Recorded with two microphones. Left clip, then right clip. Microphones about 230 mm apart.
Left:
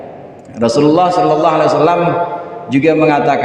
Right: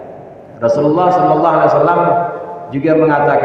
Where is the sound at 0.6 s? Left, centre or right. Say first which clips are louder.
Left 1 dB; left.